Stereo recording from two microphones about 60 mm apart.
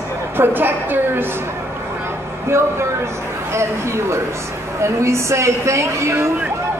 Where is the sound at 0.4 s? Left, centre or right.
Right.